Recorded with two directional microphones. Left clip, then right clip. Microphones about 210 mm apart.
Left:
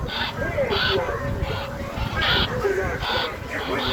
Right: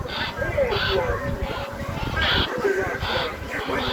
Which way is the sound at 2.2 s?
30° left (ahead or behind).